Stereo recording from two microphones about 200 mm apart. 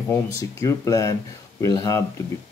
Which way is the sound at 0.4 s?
15° left (ahead or behind).